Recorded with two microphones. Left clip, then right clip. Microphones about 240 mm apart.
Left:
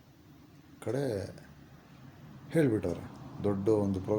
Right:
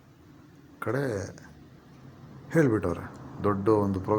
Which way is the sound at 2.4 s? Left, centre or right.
Centre.